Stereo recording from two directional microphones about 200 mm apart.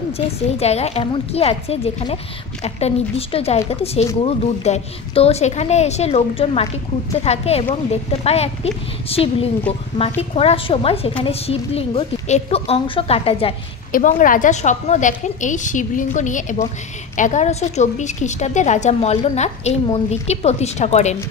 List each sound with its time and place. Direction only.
0.6 s a woman's voice: 30° left (ahead or behind)
13.9 s a woman's voice: 40° left (ahead or behind)